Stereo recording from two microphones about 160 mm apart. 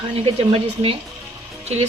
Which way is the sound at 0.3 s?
35° right (ahead or behind).